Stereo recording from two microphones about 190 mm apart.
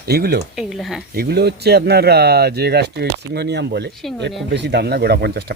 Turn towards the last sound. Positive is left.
turn(degrees=-55)  # may be behind; listen again after turning